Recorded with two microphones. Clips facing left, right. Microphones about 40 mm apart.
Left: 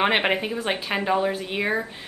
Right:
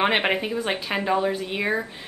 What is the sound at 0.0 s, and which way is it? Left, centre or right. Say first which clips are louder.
Speech: even; centre.